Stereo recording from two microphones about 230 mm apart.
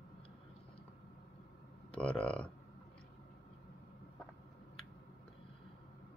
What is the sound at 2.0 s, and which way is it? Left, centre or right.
Speech, centre.